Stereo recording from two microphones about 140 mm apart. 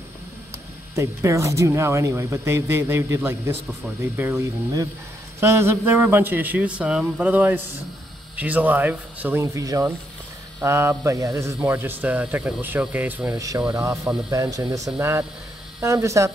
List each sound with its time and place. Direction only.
0.9 s a man's voice: 20° right (ahead or behind)
13.3 s speech: 25° right (ahead or behind)